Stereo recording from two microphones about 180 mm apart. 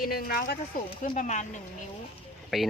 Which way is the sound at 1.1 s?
40° left (ahead or behind).